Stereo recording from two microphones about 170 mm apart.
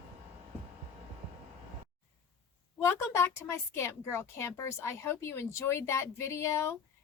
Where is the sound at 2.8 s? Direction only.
15° left (ahead or behind).